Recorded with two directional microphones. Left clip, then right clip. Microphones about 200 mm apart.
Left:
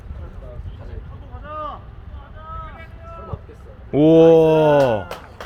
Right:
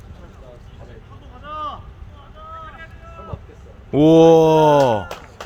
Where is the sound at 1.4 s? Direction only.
60° right (ahead or behind).